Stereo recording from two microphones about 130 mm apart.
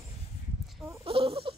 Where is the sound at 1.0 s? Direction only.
45° right (ahead or behind).